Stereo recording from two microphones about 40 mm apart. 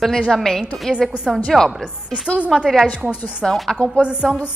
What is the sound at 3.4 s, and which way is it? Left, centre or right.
Speech, centre.